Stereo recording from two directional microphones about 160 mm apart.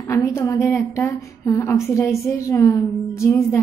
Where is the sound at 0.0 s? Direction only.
20° left (ahead or behind).